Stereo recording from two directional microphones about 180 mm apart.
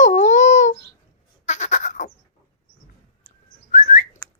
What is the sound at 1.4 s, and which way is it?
Goat, 40° left (ahead or behind).